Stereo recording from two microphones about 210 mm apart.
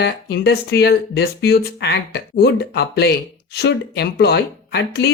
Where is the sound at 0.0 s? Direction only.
50° left (ahead or behind).